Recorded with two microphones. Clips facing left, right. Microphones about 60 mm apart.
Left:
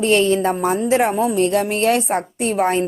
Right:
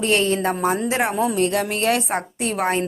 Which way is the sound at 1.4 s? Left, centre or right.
Left.